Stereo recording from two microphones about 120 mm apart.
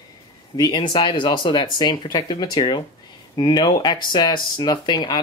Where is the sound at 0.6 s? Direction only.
35° left (ahead or behind).